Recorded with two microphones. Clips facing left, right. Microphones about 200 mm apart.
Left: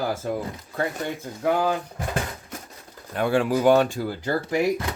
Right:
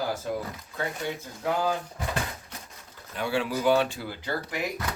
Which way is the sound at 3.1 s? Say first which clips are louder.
Left 7 dB; 50° left (ahead or behind).